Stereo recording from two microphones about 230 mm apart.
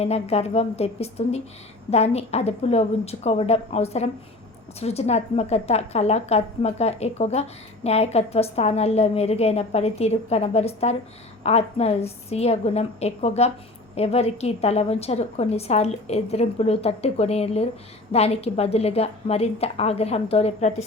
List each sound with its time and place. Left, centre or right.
0.0 s a woman's voice: left